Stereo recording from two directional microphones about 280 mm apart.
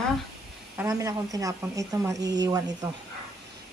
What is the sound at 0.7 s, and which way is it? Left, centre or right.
Speech, centre.